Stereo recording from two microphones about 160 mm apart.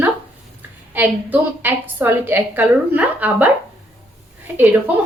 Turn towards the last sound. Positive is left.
turn(degrees=-10)  # may be behind; listen again after turning